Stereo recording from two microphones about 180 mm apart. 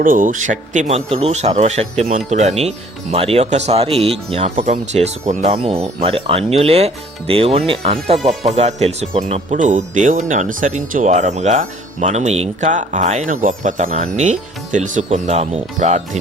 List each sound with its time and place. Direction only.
0.0 s speech: 50° right (ahead or behind)